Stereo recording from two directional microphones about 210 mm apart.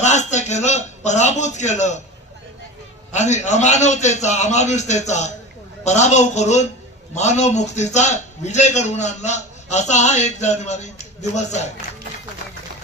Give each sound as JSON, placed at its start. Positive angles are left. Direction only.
{"t": 0.0, "sound": "a man's voice", "side_deg": 35}
{"t": 3.1, "sound": "a man's voice", "side_deg": 35}